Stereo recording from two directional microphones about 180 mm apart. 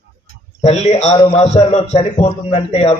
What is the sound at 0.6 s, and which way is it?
A man's voice, 35° left (ahead or behind).